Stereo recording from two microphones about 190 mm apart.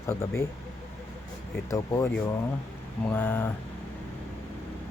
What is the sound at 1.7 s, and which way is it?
Speech, 15° left (ahead or behind).